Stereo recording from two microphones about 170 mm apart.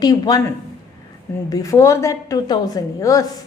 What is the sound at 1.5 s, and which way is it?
A woman's voice, 20° left (ahead or behind).